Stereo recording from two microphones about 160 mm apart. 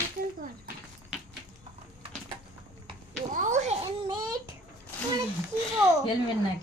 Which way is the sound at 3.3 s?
50° right (ahead or behind).